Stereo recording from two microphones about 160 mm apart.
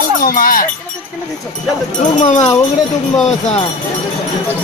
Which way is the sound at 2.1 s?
50° left (ahead or behind).